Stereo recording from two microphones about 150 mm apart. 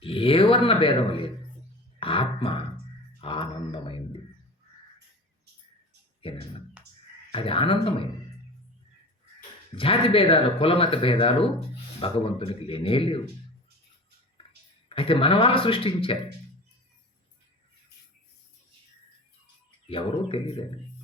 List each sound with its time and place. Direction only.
0.0 s speech: 35° left (ahead or behind)
2.0 s music: 35° left (ahead or behind)
3.2 s a sound: 35° left (ahead or behind)
6.8 s a sound: 5° right (ahead or behind)
7.3 s speech: 35° left (ahead or behind)
9.7 s speech: 35° left (ahead or behind)
14.8 s speech: 35° left (ahead or behind)
19.9 s speech: 35° left (ahead or behind)